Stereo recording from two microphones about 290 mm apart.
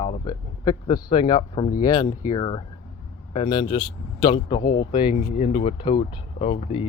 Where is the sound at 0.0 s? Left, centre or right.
Centre.